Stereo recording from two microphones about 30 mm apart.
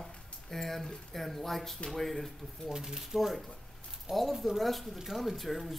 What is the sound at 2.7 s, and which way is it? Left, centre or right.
Speech, right.